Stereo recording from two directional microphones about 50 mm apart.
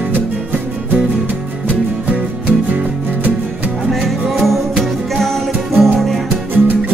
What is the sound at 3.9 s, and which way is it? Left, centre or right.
Music, centre.